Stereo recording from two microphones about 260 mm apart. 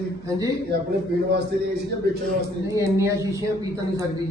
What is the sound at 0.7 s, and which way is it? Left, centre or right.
Speech, right.